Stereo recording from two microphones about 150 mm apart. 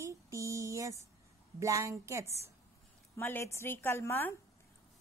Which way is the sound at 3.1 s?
15° left (ahead or behind).